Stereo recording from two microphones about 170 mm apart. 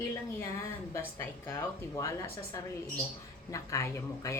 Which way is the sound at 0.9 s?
15° left (ahead or behind).